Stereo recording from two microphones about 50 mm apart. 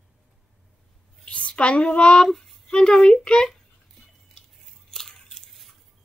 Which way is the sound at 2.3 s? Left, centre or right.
Centre.